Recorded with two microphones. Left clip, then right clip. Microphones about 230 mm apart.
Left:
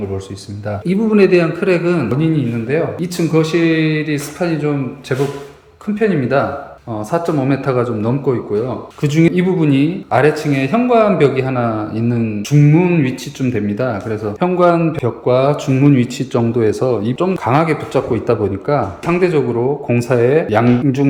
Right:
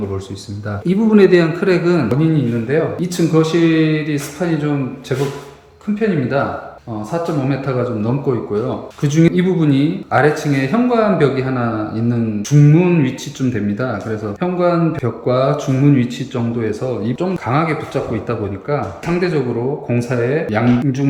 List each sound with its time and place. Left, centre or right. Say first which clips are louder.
0.9 s speech: right 1 dB; centre; by 17.1 s left
17.1 s speech: left 4 dB; centre